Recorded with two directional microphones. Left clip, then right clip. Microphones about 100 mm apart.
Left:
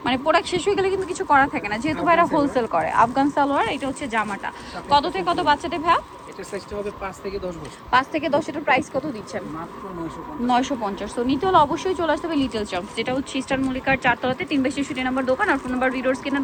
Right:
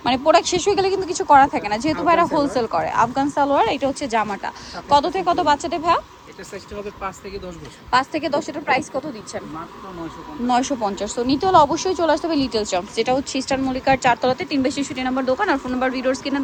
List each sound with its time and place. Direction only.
0.0 s a woman's voice: 45° right (ahead or behind)
3.0 s a woman's voice: 20° right (ahead or behind)
3.5 s a woman's voice: 45° right (ahead or behind)
7.9 s a woman's voice: 30° right (ahead or behind)
10.4 s speech: 35° right (ahead or behind)
11.2 s a woman's voice: 45° right (ahead or behind)